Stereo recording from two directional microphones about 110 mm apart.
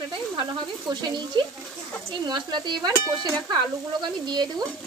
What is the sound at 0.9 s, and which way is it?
Speech, 40° right (ahead or behind).